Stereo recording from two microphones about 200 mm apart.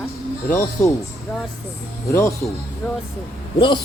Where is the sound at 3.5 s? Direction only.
25° left (ahead or behind).